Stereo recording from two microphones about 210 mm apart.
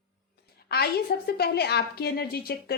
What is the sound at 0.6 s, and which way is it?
A woman's voice, 50° left (ahead or behind).